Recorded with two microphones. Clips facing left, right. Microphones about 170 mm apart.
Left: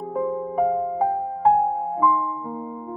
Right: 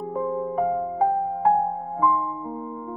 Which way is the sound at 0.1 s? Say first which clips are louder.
Left 1 dB; 15° left (ahead or behind).